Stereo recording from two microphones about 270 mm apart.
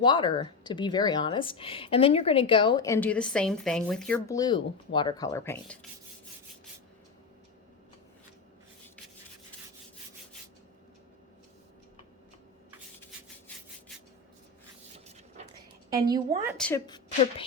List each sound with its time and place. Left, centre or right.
0.0 s a woman's voice: centre
15.9 s a woman's voice: centre
16.6 s a woman's voice: centre
16.8 s a woman's voice: centre